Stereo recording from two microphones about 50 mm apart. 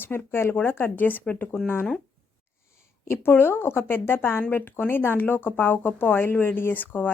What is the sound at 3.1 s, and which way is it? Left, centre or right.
Speech, left.